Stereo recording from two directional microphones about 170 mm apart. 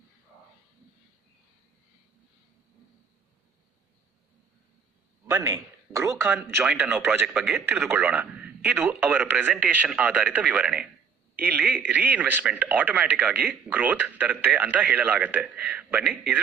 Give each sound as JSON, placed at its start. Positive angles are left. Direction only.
{"t": 5.2, "sound": "a man's voice", "side_deg": -15}